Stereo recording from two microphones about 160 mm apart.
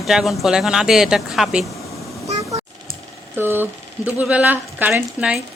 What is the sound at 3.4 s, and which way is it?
A woman's voice, 15° right (ahead or behind).